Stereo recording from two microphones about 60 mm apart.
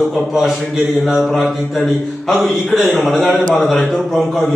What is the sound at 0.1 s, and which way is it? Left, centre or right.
A man's voice, centre.